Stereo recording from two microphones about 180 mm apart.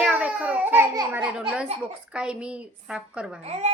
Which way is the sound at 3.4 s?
40° right (ahead or behind).